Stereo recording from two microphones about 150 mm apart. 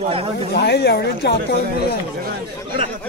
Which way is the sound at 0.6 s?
90° left.